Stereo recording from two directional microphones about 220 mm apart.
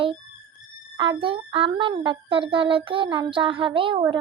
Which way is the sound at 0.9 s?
25° right (ahead or behind).